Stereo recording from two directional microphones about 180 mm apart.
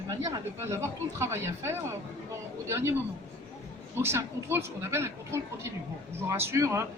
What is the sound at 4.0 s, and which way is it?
A man's voice, 15° right (ahead or behind).